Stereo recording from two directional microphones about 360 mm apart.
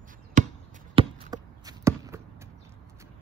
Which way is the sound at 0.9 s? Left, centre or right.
Centre.